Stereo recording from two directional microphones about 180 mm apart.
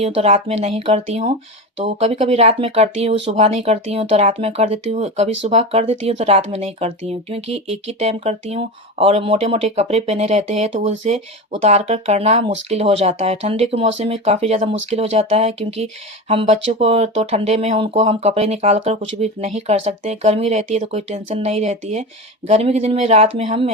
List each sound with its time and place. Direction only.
0.0 s speech: 35° right (ahead or behind)